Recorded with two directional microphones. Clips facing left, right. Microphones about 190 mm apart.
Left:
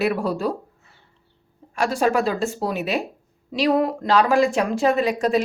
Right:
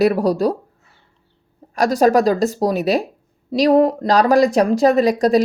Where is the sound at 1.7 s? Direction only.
40° right (ahead or behind).